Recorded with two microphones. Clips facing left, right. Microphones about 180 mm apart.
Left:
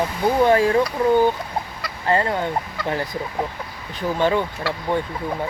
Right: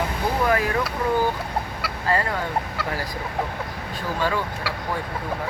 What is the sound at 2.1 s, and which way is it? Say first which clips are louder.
Speech: left 4 dB; 25° left (ahead or behind).